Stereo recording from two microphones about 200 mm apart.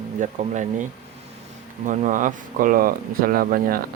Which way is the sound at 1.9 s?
40° right (ahead or behind).